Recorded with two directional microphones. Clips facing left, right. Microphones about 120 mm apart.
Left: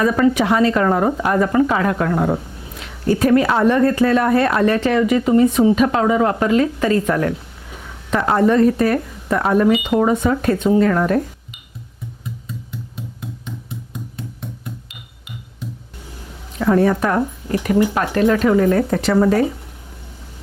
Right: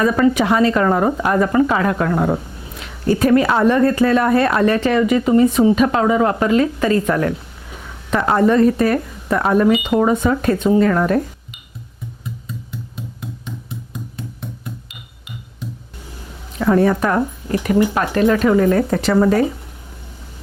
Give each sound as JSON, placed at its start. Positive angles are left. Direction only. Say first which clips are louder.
{"t": 0.0, "sound": "speech", "louder": "right 1 dB", "side_deg": -20}
{"t": 12.2, "sound": "a sound", "louder": "right 1 dB", "side_deg": -15}
{"t": 13.5, "sound": "glass", "louder": "right 1 dB", "side_deg": -20}
{"t": 16.0, "sound": "speech", "louder": "right 1 dB", "side_deg": -25}